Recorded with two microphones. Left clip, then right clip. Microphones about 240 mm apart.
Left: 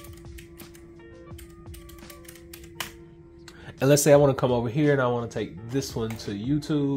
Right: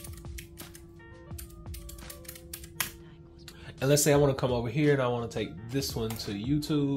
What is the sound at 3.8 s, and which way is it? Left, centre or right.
Speech, left.